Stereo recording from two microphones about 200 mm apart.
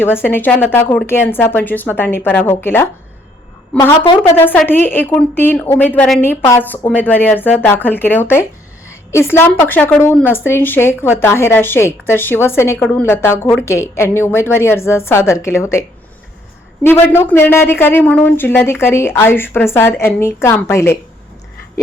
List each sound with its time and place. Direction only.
0.0 s a woman's voice: 10° left (ahead or behind)
16.8 s speech: 10° left (ahead or behind)